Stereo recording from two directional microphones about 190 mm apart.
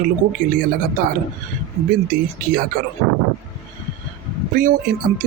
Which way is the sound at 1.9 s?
45° right (ahead or behind).